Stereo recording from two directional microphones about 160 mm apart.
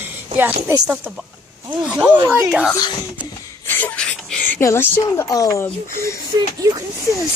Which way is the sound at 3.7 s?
10° left (ahead or behind).